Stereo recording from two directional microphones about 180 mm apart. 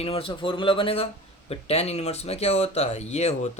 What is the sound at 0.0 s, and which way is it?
Speech, 30° left (ahead or behind).